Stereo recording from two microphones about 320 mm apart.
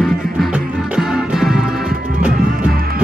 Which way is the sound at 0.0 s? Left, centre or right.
Centre.